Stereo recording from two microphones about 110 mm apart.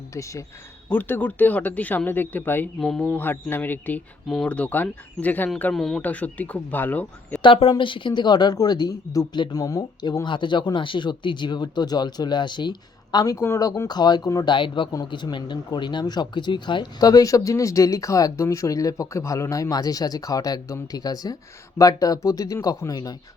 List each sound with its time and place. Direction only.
0.1 s speech: 30° left (ahead or behind)
0.9 s speech: 20° left (ahead or behind)
5.7 s speech: 5° left (ahead or behind)
6.0 s speech: 15° left (ahead or behind)
7.4 s a woman's voice: 55° left (ahead or behind); by 13.3 s 40° left (ahead or behind)
13.3 s speech: 25° left (ahead or behind)